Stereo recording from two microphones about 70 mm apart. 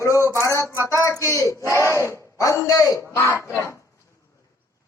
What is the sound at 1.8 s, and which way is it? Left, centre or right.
Speech, right.